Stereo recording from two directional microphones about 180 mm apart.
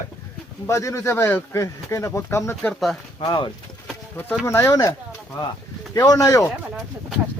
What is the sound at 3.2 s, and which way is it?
Speech, 30° left (ahead or behind).